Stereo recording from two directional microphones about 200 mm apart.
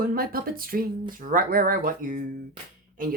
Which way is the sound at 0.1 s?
45° right (ahead or behind).